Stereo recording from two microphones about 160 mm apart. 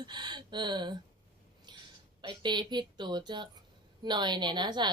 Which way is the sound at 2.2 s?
30° right (ahead or behind).